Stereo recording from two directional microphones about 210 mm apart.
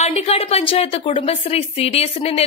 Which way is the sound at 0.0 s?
30° left (ahead or behind).